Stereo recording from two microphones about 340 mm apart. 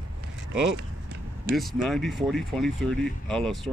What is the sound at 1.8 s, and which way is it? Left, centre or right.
Speech, centre.